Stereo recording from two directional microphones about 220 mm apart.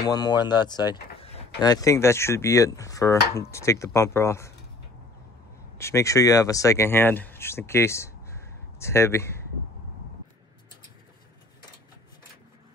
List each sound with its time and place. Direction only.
0.0 s speech: 15° left (ahead or behind)
5.8 s speech: 10° left (ahead or behind)